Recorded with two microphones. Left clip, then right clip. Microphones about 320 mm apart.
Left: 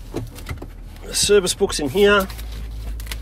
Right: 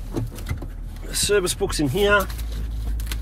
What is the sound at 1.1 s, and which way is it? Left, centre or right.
Speech, left.